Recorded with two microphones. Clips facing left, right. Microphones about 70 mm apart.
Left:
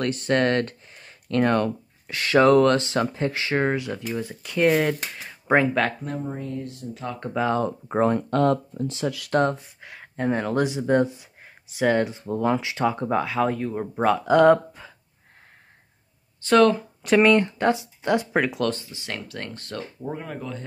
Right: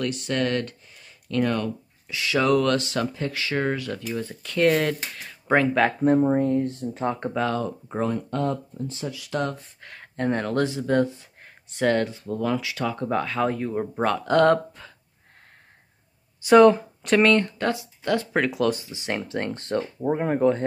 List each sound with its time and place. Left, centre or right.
0.0 s speech: left; by 5.7 s centre
6.2 s speech: right
7.6 s speech: left
8.3 s speech: left
9.3 s speech: left
9.6 s speech: centre
13.1 s speech: centre
16.3 s speech: centre
17.0 s speech: centre
18.4 s speech: centre
18.7 s speech: centre; by 20.6 s right